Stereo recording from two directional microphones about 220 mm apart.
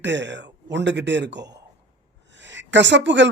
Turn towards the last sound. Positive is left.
turn(degrees=-55)  # may be behind; listen again after turning